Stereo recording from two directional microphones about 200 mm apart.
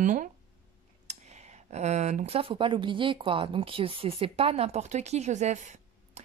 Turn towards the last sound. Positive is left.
turn(degrees=-35)  # may be behind; listen again after turning